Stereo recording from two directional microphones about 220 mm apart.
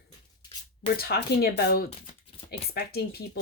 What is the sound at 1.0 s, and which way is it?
Speech, 45° left (ahead or behind).